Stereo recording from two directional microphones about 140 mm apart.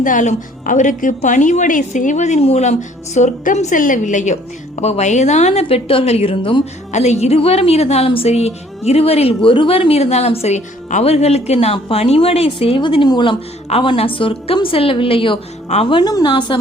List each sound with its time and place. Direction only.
0.0 s a woman's voice: 65° left (ahead or behind); by 6.6 s 40° left (ahead or behind)
6.9 s a woman's voice: 55° left (ahead or behind); by 13.3 s 35° left (ahead or behind)
13.7 s a woman's voice: 45° left (ahead or behind)